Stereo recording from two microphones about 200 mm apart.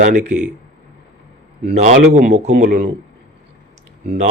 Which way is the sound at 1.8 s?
40° right (ahead or behind).